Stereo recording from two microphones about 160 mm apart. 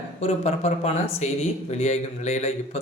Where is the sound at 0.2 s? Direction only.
45° left (ahead or behind).